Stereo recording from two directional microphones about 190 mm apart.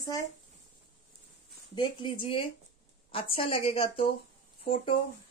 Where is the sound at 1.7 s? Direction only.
25° left (ahead or behind).